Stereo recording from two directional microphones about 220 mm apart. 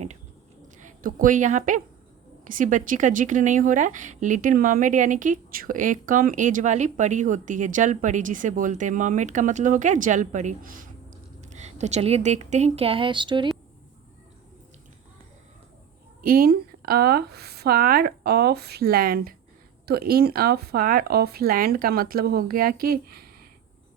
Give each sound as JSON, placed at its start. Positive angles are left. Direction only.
{"t": 0.8, "sound": "a woman's voice", "side_deg": -35}
{"t": 16.2, "sound": "speech", "side_deg": -40}